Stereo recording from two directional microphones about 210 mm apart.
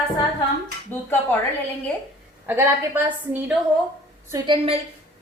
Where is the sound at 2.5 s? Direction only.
10° right (ahead or behind).